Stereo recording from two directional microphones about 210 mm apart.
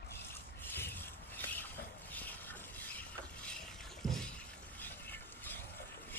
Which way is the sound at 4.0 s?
Centre (ahead or behind).